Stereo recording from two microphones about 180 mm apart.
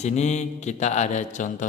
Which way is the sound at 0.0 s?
40° left (ahead or behind).